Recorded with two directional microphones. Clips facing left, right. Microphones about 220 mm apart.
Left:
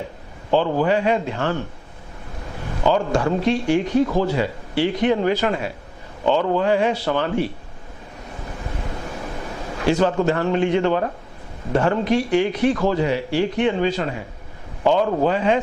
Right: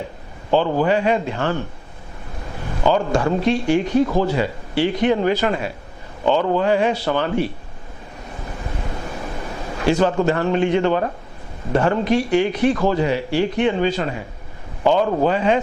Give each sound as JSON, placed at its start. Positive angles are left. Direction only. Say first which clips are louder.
{"t": 0.8, "sound": "speech", "louder": "right 1 dB", "side_deg": -15}
{"t": 8.6, "sound": "a sound", "louder": "right 1 dB", "side_deg": -25}
{"t": 11.7, "sound": "speech", "louder": "right 1 dB", "side_deg": -15}